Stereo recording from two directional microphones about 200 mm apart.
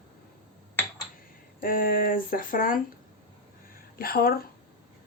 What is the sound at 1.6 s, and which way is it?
Speech, 45° left (ahead or behind).